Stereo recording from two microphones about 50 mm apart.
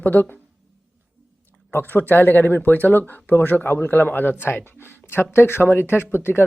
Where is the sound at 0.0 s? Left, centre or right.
Left.